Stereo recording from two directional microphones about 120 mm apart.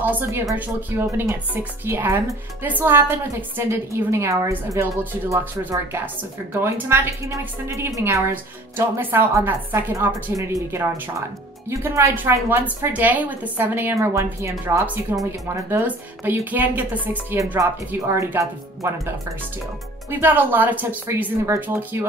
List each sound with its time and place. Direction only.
0.0 s a woman's voice: 15° right (ahead or behind)
17.6 s a woman's voice: 25° right (ahead or behind)